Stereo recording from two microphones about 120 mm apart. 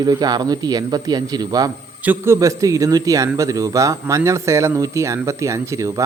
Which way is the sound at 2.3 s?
30° right (ahead or behind).